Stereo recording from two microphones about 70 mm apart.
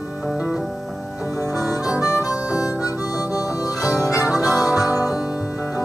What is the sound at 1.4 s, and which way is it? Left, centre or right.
Harmonica, right.